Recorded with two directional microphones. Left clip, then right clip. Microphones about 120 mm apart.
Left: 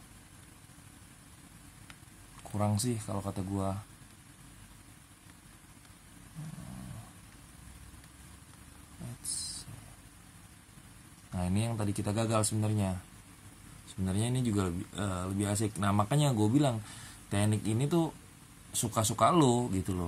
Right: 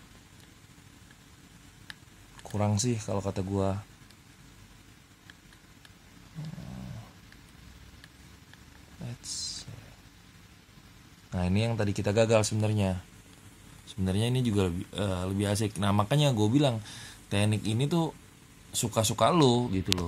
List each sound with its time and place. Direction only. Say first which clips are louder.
2.5 s speech: right 3 dB; 45° right (ahead or behind)
11.3 s speech: right 6 dB; 55° right (ahead or behind)
14.0 s speech: right 4 dB; 50° right (ahead or behind); by 19.7 s 30° right (ahead or behind)